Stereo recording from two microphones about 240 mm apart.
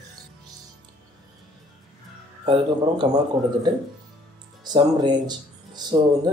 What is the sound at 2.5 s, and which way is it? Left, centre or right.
A man's voice, centre.